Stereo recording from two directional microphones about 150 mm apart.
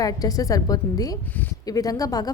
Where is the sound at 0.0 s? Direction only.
25° left (ahead or behind).